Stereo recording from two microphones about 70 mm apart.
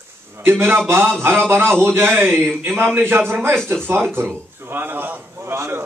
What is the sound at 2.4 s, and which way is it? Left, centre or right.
Speech, centre.